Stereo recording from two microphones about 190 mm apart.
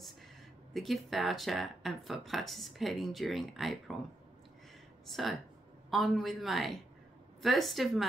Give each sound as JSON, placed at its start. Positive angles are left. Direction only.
{"t": 0.7, "sound": "speech", "side_deg": 0}
{"t": 5.0, "sound": "speech", "side_deg": 0}